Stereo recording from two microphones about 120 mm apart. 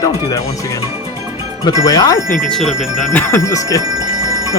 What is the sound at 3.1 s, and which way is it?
Speech, 20° left (ahead or behind).